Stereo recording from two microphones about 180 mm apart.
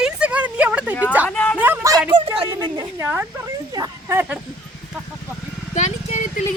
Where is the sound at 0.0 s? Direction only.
5° right (ahead or behind).